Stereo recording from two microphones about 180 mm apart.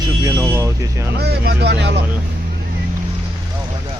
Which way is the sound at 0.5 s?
15° right (ahead or behind).